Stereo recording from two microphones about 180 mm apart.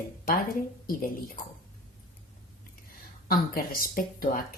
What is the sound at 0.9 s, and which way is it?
Speech, 50° left (ahead or behind).